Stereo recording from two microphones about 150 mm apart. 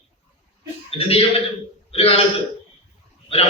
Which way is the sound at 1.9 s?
40° left (ahead or behind).